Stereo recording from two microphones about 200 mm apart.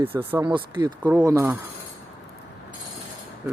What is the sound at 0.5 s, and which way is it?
Speech, 20° right (ahead or behind).